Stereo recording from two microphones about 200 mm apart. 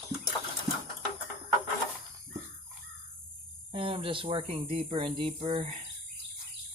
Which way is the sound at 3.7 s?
25° right (ahead or behind).